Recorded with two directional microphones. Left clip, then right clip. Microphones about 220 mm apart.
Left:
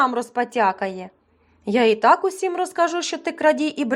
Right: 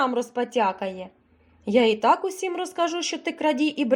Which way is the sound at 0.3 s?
20° left (ahead or behind).